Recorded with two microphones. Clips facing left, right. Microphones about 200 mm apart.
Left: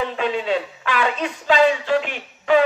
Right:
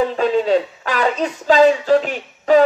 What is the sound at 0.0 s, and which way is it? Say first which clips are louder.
Speech: right 6 dB; 40° right (ahead or behind).